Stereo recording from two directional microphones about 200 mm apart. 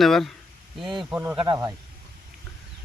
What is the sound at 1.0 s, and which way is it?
Speech, 15° right (ahead or behind).